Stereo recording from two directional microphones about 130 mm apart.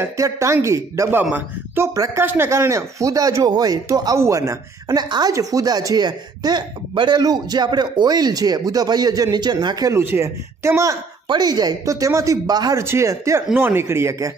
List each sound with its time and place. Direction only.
0.0 s a man's voice: 20° right (ahead or behind)